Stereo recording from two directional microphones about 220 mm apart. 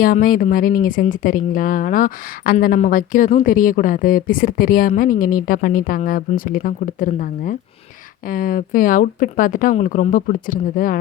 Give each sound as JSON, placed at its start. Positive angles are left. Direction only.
{"t": 0.0, "sound": "speech", "side_deg": 40}